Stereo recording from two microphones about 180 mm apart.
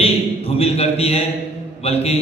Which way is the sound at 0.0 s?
35° left (ahead or behind).